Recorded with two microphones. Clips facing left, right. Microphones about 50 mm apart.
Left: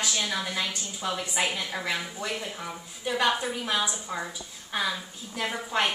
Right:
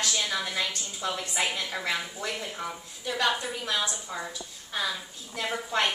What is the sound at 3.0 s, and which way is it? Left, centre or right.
A woman's voice, centre.